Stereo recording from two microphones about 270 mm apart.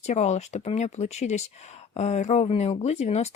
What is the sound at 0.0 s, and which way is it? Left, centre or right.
Speech, left.